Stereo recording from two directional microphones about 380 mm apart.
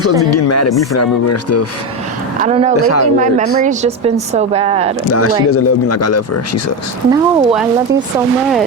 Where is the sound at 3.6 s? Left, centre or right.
Centre.